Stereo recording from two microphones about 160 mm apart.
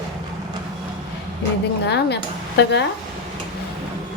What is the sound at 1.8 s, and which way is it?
Speech, 90° left.